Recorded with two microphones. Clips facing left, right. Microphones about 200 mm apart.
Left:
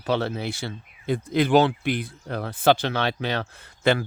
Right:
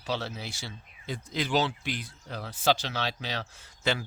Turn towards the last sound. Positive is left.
turn(degrees=55)  # may be behind; listen again after turning